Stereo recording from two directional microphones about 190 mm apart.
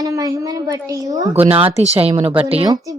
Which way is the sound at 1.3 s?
30° right (ahead or behind).